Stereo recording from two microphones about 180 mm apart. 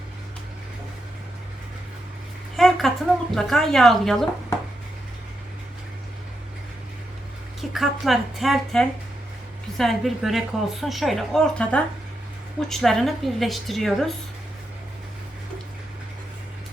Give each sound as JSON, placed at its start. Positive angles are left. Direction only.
{"t": 2.6, "sound": "a sound", "side_deg": 0}
{"t": 3.3, "sound": "a woman's voice", "side_deg": 0}
{"t": 7.6, "sound": "a woman's voice", "side_deg": 0}